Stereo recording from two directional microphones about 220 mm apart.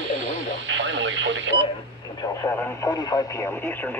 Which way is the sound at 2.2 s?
15° left (ahead or behind).